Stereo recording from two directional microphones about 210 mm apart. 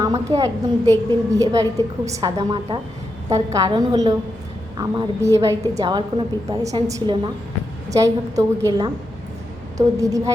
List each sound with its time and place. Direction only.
0.0 s a woman's voice: 15° right (ahead or behind)